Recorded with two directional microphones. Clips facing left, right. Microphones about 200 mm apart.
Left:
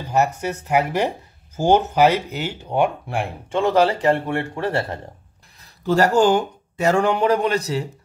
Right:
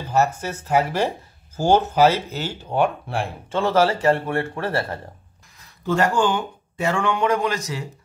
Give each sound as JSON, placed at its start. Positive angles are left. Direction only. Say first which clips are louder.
{"t": 0.1, "sound": "speech", "louder": "left 1 dB", "side_deg": 15}
{"t": 5.9, "sound": "speech", "louder": "left 4 dB", "side_deg": 40}